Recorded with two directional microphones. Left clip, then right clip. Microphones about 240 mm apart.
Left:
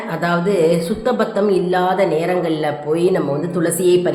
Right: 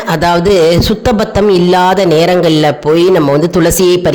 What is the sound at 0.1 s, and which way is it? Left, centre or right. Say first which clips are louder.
Music: right 9 dB; right.